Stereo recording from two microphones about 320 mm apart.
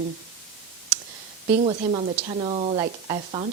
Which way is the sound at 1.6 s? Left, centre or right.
Centre.